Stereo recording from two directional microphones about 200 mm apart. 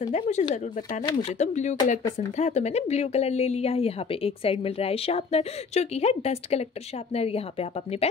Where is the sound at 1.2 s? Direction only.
35° left (ahead or behind).